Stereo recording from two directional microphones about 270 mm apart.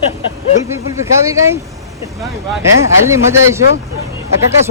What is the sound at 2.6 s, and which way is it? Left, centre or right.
Speech, centre.